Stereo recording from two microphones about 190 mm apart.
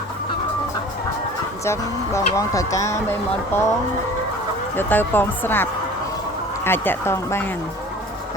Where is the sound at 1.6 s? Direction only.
15° left (ahead or behind).